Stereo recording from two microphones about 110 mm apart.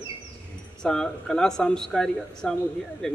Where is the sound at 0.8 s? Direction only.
5° left (ahead or behind).